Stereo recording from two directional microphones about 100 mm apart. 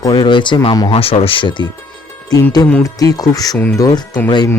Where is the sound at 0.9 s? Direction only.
70° left (ahead or behind); by 1.6 s 55° left (ahead or behind).